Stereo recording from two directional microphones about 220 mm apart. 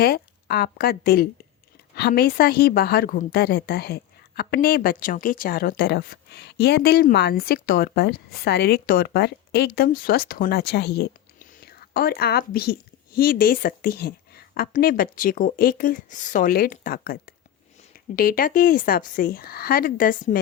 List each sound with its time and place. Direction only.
0.0 s a woman's voice: 45° left (ahead or behind)